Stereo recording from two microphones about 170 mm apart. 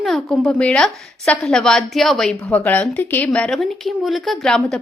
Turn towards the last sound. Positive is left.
turn(degrees=5)  # may be behind; listen again after turning